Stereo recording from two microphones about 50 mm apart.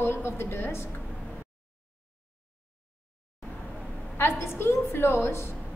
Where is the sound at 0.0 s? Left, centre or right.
Left.